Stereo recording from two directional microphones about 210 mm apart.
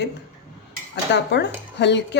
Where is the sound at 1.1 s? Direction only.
55° left (ahead or behind).